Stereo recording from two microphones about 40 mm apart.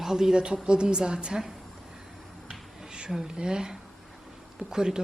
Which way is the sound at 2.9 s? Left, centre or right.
Right.